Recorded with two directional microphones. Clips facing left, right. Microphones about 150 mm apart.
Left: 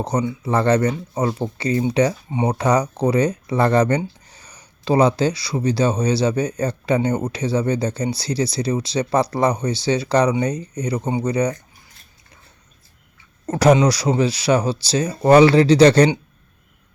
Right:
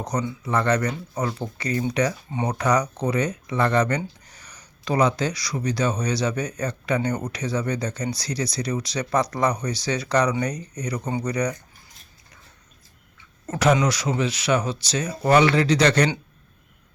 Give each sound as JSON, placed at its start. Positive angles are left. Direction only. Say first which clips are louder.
{"t": 0.0, "sound": "speech", "louder": "left 5 dB", "side_deg": 25}
{"t": 13.4, "sound": "speech", "louder": "left 6 dB", "side_deg": 35}